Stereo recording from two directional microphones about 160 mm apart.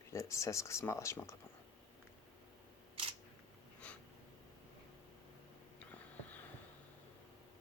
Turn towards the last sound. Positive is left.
turn(degrees=10)  # may be behind; listen again after turning